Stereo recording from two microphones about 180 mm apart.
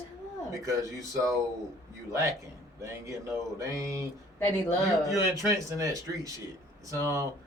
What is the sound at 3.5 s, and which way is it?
Speech, 15° right (ahead or behind).